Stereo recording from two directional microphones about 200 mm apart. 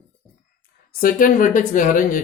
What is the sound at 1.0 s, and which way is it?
A woman's voice, 45° left (ahead or behind).